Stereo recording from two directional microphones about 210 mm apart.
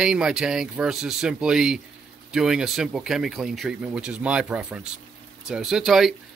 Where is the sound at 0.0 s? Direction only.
5° right (ahead or behind).